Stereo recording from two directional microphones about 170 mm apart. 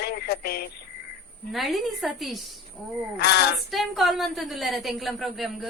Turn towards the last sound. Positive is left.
turn(degrees=0)  # may be behind; listen again after turning